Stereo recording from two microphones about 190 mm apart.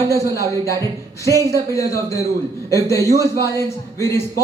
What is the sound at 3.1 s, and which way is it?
Speech, 15° right (ahead or behind).